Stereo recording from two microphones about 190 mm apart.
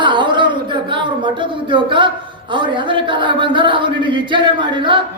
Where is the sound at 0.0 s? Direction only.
25° right (ahead or behind).